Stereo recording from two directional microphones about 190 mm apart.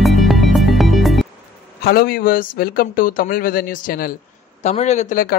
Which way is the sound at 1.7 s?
55° left (ahead or behind).